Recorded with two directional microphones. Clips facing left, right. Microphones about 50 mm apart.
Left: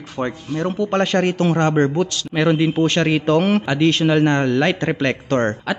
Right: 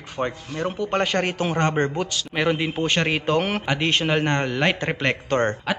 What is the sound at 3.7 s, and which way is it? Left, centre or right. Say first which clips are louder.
A man's voice: left 5 dB; centre.